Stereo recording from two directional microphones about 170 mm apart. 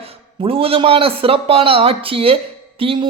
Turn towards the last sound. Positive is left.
turn(degrees=-30)  # may be behind; listen again after turning